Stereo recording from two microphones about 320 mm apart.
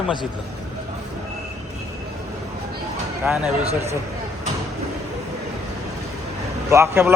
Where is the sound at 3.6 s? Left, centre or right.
Centre.